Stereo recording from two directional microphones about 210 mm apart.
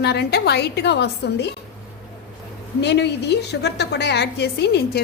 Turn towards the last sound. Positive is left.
turn(degrees=50)  # may be behind; listen again after turning